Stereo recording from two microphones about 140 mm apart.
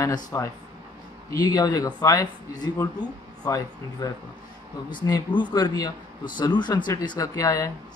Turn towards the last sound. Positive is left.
turn(degrees=25)  # may be behind; listen again after turning